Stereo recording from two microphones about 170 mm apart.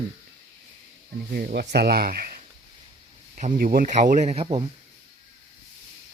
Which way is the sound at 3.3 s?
50° right (ahead or behind).